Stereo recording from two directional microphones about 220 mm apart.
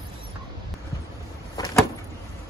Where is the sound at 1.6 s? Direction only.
15° left (ahead or behind).